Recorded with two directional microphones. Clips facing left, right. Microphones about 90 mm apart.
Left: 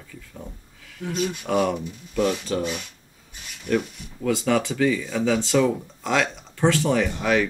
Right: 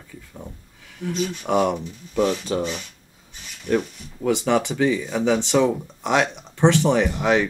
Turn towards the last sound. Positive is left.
turn(degrees=-20)  # may be behind; listen again after turning